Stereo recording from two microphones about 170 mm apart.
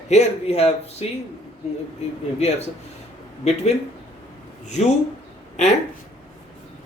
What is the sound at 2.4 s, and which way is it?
Speech, 40° left (ahead or behind).